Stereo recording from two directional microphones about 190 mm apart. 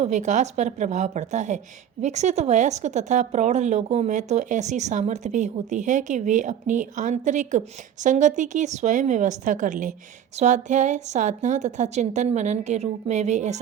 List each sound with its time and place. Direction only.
0.0 s a woman's voice: 40° right (ahead or behind)